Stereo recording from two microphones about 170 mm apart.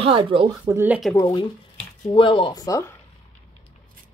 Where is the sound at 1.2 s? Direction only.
15° left (ahead or behind).